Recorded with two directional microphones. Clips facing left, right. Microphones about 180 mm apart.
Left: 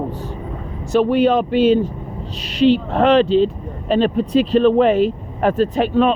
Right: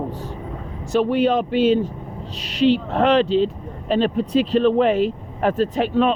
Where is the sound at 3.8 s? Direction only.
60° left (ahead or behind).